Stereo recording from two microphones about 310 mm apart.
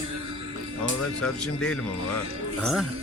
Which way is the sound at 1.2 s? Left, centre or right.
Centre.